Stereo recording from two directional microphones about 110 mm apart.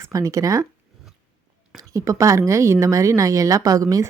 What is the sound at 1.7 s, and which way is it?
A woman's voice, 30° right (ahead or behind).